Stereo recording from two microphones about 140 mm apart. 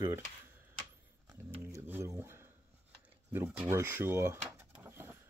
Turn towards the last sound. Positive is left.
turn(degrees=-15)  # may be behind; listen again after turning